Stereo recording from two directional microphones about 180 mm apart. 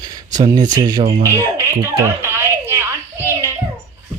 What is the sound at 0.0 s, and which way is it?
Speech, 20° right (ahead or behind).